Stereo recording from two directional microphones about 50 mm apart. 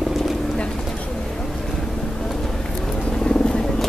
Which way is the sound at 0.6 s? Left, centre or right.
Centre.